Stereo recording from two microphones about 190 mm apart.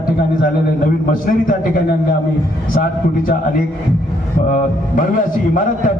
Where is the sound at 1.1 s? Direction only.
45° left (ahead or behind).